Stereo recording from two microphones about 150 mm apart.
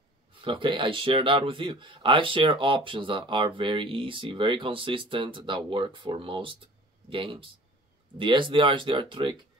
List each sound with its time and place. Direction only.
0.3 s speech: 35° right (ahead or behind)